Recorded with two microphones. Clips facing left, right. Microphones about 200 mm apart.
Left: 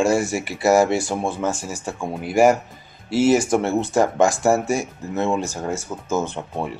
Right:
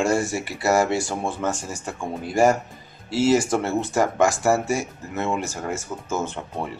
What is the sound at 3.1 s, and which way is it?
Speech, 15° left (ahead or behind).